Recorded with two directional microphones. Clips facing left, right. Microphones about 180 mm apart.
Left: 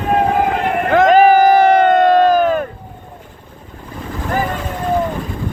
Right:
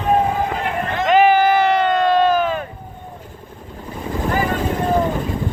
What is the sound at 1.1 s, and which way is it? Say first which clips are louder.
Crowd: left 3 dB; 40° left (ahead or behind).